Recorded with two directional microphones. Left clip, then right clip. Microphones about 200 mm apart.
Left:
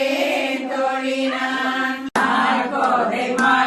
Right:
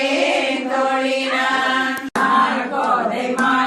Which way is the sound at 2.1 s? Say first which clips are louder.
Right 2 dB; centre (ahead or behind).